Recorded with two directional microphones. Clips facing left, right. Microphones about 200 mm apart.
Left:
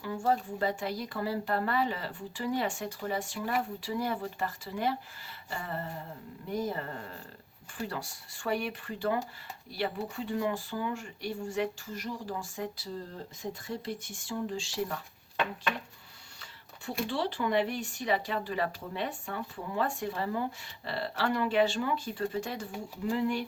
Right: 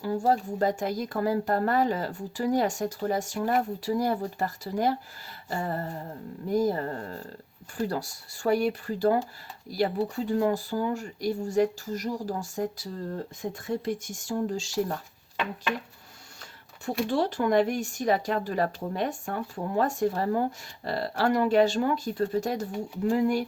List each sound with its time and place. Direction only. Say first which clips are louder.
0.0 s speech: right 5 dB; 40° right (ahead or behind)
17.1 s speech: right 6 dB; 45° right (ahead or behind)